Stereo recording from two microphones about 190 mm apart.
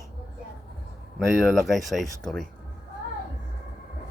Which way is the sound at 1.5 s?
Centre (ahead or behind).